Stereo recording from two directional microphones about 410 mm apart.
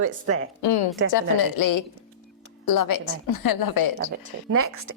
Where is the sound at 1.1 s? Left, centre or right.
Left.